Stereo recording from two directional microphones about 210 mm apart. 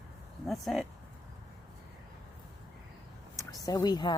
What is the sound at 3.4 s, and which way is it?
Speech, 15° left (ahead or behind).